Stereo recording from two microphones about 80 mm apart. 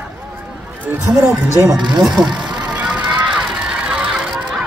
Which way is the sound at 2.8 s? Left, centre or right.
Centre.